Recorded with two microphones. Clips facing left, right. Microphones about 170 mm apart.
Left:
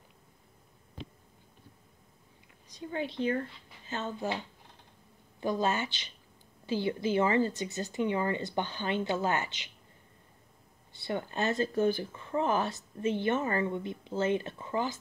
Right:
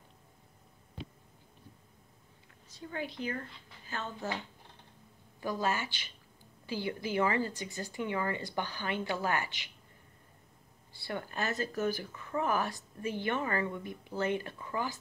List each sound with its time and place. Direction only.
2.7 s speech: 20° left (ahead or behind)
5.4 s speech: 25° left (ahead or behind)
10.9 s speech: 20° left (ahead or behind)